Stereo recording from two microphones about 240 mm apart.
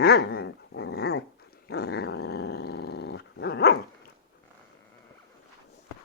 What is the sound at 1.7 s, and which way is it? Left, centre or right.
Growling, left.